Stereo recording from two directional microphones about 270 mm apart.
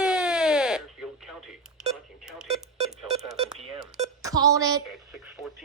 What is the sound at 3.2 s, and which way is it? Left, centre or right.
Beep, centre.